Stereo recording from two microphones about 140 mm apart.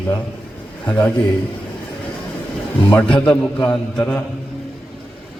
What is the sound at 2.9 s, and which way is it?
A man's voice, 10° left (ahead or behind).